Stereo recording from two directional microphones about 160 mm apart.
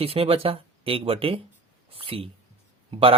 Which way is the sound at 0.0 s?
35° right (ahead or behind).